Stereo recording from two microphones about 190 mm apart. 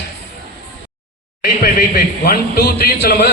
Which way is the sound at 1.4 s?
50° left (ahead or behind).